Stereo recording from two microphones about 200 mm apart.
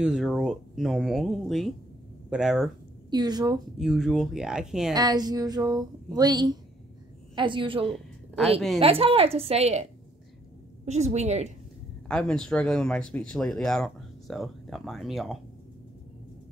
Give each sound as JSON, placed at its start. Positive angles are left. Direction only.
{"t": 0.0, "sound": "speech", "side_deg": -5}
{"t": 3.1, "sound": "a woman's voice", "side_deg": -20}
{"t": 3.7, "sound": "speech", "side_deg": 0}
{"t": 4.9, "sound": "a woman's voice", "side_deg": -20}
{"t": 10.9, "sound": "a woman's voice", "side_deg": -35}
{"t": 12.1, "sound": "speech", "side_deg": 5}